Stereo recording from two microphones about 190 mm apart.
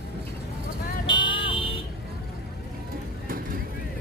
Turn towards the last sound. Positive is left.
turn(degrees=-50)  # may be behind; listen again after turning